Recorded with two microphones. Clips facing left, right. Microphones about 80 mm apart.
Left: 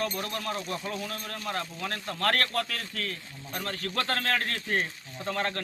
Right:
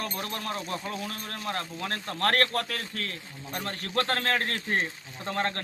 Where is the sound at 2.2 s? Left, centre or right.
Right.